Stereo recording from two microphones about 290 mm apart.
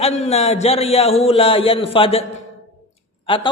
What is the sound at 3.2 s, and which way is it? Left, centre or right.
Speech, centre.